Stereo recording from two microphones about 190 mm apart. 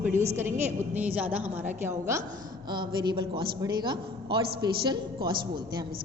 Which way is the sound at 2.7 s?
25° right (ahead or behind).